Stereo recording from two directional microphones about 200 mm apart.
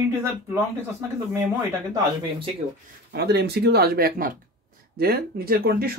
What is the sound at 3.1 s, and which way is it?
Speech, 55° right (ahead or behind).